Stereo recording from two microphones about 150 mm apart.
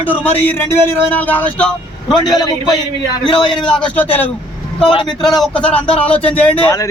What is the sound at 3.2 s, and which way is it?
Speech, 30° left (ahead or behind).